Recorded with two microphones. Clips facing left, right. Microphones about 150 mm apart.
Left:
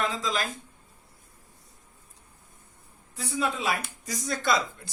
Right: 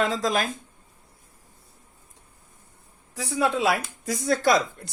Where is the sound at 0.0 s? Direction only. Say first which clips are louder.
Right 5 dB; 70° right (ahead or behind).